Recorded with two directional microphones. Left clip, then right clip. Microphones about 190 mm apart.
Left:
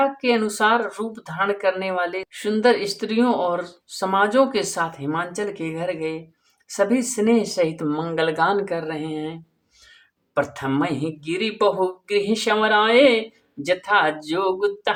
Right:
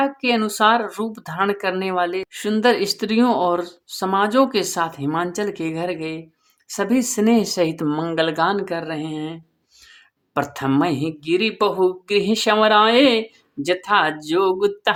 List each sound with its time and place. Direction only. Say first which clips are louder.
0.0 s speech: even; 30° right (ahead or behind)
10.3 s speech: right 2 dB; 35° right (ahead or behind)